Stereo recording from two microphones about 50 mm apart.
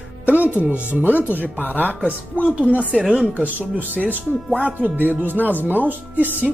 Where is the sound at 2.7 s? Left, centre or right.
Right.